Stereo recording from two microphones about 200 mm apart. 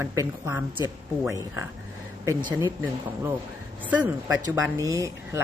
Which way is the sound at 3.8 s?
10° right (ahead or behind).